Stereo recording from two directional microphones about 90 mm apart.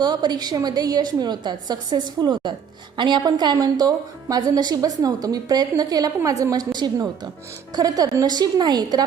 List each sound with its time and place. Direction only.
0.0 s a woman's voice: 50° right (ahead or behind)